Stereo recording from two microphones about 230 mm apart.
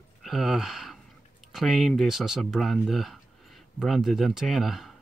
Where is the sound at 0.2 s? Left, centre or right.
Centre.